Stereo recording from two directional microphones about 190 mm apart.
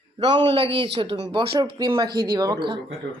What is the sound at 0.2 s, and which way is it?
A woman's voice, 25° right (ahead or behind).